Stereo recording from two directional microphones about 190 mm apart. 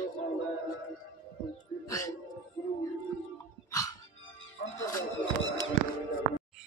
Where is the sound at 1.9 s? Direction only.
15° left (ahead or behind).